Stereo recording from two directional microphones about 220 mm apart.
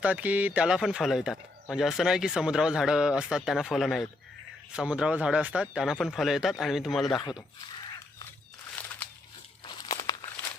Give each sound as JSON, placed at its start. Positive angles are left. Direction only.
{"t": 0.0, "sound": "speech", "side_deg": -5}
{"t": 10.0, "sound": "walk", "side_deg": 15}